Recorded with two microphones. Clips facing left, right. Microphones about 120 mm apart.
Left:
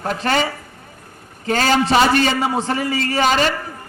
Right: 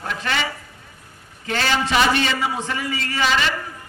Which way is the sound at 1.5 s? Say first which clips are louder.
Left 5 dB; 40° left (ahead or behind).